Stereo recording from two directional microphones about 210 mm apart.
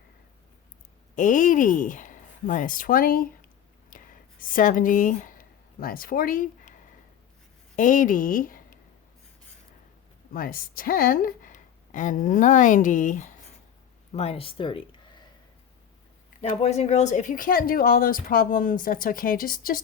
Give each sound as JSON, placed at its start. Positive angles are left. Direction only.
{"t": 1.1, "sound": "speech", "side_deg": 40}
{"t": 3.8, "sound": "a sound", "side_deg": 40}
{"t": 7.8, "sound": "speech", "side_deg": 35}
{"t": 10.3, "sound": "a woman's voice", "side_deg": 45}
{"t": 16.4, "sound": "speech", "side_deg": 30}